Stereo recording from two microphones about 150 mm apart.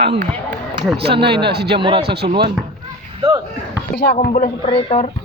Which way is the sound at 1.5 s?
90° right.